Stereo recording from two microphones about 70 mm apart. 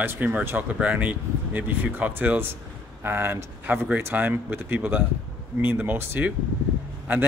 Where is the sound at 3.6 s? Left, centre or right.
Right.